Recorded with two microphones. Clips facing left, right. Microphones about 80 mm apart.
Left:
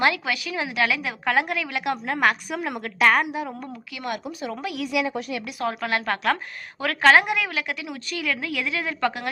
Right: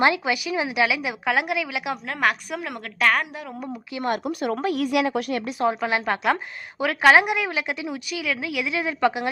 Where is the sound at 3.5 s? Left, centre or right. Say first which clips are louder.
Right 3 dB; centre.